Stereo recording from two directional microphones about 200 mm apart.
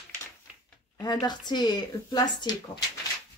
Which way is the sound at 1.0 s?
20° left (ahead or behind).